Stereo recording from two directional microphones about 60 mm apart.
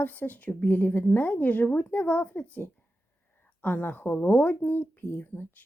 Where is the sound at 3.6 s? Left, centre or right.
Left.